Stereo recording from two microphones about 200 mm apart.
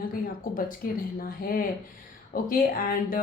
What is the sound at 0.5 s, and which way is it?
Speech, 45° left (ahead or behind).